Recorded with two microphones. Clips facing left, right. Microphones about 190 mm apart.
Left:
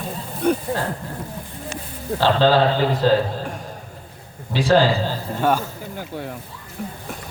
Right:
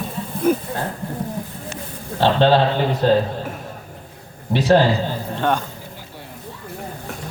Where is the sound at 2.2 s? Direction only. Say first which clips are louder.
Right 1 dB; 25° right (ahead or behind).